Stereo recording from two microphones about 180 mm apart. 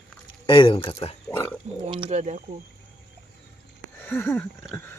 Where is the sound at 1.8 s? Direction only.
30° right (ahead or behind).